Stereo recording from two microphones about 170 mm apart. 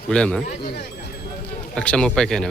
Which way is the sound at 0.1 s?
5° left (ahead or behind).